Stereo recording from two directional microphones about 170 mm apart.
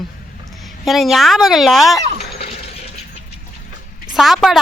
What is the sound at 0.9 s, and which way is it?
Speech, centre (ahead or behind).